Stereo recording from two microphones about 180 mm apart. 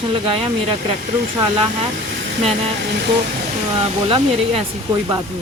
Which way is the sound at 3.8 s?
30° right (ahead or behind).